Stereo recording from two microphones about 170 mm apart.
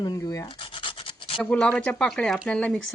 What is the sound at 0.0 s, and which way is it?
Rub, 25° left (ahead or behind).